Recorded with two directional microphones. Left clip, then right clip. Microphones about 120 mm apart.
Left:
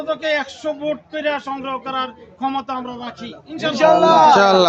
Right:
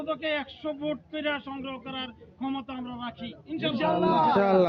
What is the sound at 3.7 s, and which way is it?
Speech, 15° left (ahead or behind).